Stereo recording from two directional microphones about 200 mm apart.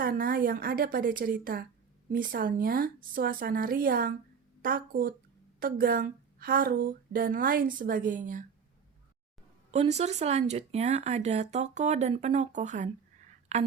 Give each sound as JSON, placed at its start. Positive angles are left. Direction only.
{"t": 0.0, "sound": "speech", "side_deg": -45}
{"t": 9.7, "sound": "speech", "side_deg": -35}